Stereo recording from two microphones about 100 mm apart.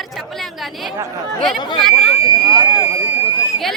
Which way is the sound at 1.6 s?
50° left (ahead or behind).